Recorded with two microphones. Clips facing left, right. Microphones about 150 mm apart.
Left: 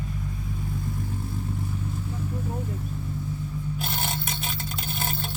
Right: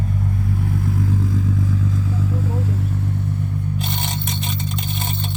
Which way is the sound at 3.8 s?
5° left (ahead or behind).